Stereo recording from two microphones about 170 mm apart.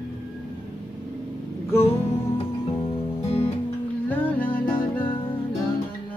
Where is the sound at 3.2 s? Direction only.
35° left (ahead or behind).